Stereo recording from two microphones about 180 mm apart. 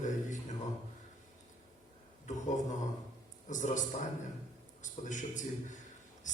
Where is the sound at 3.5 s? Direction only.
45° left (ahead or behind).